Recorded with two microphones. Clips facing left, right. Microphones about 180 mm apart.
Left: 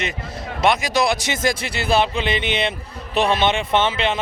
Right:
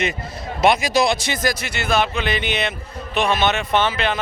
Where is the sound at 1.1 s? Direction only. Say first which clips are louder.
Even; 20° left (ahead or behind).